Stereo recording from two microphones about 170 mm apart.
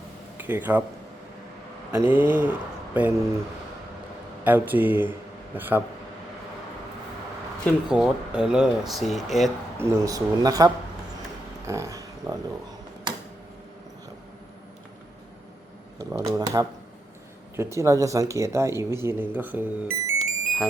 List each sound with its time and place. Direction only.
0.3 s speech: 10° right (ahead or behind)
1.9 s speech: 10° right (ahead or behind)
4.4 s speech: 10° right (ahead or behind)
7.9 s speech: 5° right (ahead or behind)
9.7 s speech: 15° right (ahead or behind)
11.6 s a sound: 15° right (ahead or behind)
16.0 s speech: 20° right (ahead or behind)